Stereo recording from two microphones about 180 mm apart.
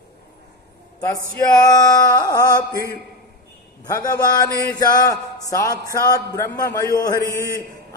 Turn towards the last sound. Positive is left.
turn(degrees=20)  # may be behind; listen again after turning